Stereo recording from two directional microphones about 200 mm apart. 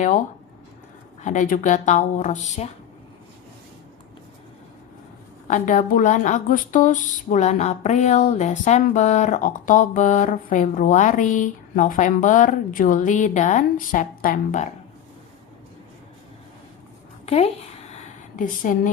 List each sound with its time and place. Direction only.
1.2 s speech: 40° left (ahead or behind)
5.5 s speech: 40° left (ahead or behind)
17.2 s a sound: 30° left (ahead or behind)